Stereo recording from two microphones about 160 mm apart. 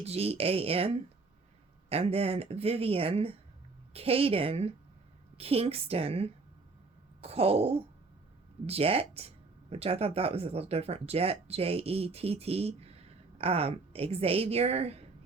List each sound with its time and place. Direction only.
0.0 s speech: 40° right (ahead or behind)